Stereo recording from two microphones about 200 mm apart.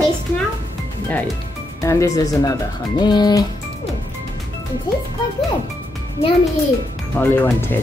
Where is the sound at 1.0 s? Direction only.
10° left (ahead or behind).